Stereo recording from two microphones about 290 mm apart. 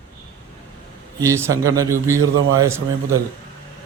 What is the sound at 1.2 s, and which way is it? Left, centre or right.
A man's voice, centre.